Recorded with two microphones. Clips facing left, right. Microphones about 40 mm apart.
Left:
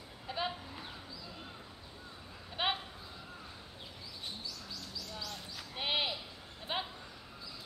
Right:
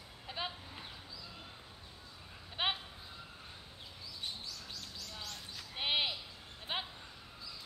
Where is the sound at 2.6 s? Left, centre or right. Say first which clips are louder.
Left 1 dB; centre.